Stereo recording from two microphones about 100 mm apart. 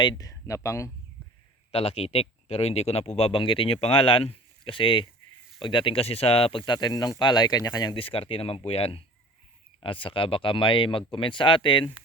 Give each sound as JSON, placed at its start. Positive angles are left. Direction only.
{"t": 0.0, "sound": "speech", "side_deg": 50}
{"t": 0.3, "sound": "speech", "side_deg": 35}
{"t": 1.7, "sound": "speech", "side_deg": 85}
{"t": 7.9, "sound": "speech", "side_deg": 65}
{"t": 9.8, "sound": "speech", "side_deg": 60}